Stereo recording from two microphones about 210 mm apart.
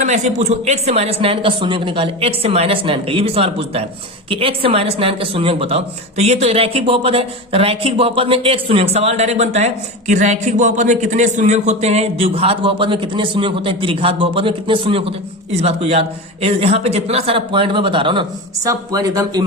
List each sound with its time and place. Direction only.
0.0 s a woman's voice: 35° right (ahead or behind); by 19.5 s 15° right (ahead or behind)